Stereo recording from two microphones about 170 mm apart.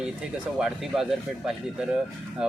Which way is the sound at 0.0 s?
5° right (ahead or behind).